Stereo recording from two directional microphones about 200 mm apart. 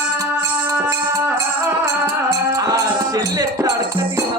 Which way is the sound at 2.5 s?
15° right (ahead or behind).